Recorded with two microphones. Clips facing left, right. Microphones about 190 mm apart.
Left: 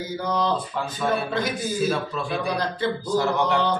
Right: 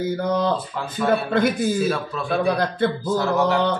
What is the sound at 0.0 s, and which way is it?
A man's voice, 55° right (ahead or behind).